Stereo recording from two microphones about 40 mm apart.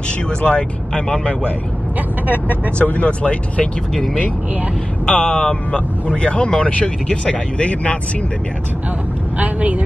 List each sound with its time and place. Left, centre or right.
0.3 s speech: left
2.8 s speech: left
3.1 s speech: left
3.9 s speech: centre
5.1 s speech: left
9.4 s speech: right